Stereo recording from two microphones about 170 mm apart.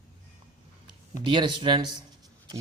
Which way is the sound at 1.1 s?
25° right (ahead or behind).